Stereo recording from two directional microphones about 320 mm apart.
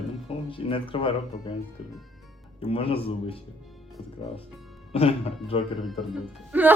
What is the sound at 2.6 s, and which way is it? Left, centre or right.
Speech, centre.